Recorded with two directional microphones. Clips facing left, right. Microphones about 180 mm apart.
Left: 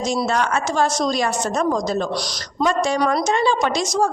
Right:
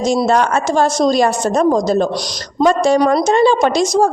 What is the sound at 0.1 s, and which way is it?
A woman's voice, 30° right (ahead or behind).